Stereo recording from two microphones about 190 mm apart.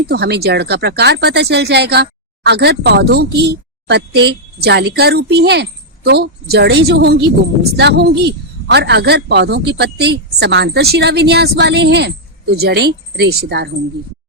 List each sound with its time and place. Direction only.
0.1 s a woman's voice: 55° right (ahead or behind)